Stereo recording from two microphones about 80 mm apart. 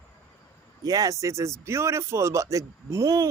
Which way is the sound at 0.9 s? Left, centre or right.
Right.